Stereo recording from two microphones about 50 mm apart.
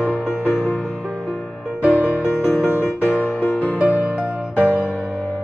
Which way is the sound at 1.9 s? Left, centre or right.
Left.